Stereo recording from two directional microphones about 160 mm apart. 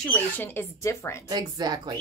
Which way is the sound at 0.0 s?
10° left (ahead or behind).